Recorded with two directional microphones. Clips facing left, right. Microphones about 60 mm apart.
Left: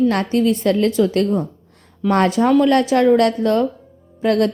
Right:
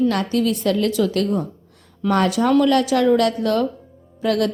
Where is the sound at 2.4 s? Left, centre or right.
Centre.